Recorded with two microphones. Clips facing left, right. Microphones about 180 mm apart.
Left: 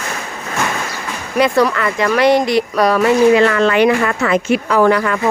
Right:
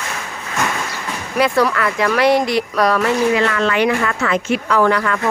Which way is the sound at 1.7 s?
Centre (ahead or behind).